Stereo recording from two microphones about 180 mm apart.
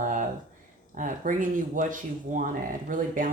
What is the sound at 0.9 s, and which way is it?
Speech, 45° right (ahead or behind).